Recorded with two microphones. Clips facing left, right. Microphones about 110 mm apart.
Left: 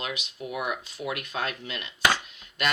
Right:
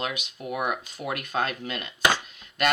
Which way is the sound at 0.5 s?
50° right (ahead or behind).